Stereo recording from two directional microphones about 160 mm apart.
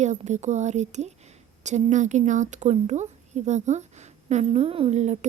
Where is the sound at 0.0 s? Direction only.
45° right (ahead or behind).